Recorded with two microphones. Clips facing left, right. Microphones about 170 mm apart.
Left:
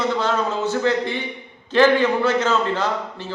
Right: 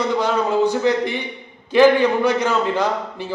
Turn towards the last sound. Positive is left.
turn(degrees=-15)  # may be behind; listen again after turning